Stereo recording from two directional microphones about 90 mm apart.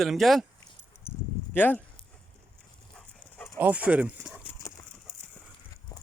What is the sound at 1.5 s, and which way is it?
Speech, 20° left (ahead or behind).